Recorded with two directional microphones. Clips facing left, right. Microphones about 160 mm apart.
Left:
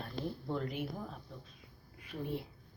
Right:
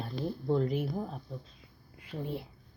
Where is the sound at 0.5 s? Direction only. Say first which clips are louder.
Right 10 dB; 35° right (ahead or behind).